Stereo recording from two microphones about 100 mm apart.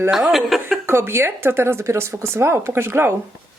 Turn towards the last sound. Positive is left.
turn(degrees=-25)  # may be behind; listen again after turning